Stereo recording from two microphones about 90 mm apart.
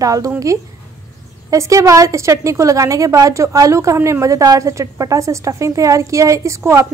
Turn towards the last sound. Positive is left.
turn(degrees=-30)  # may be behind; listen again after turning